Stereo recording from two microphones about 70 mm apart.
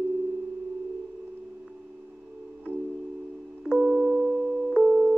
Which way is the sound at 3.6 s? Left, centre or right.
Centre.